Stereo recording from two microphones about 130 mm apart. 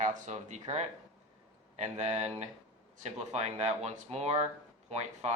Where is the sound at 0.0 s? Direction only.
70° right (ahead or behind).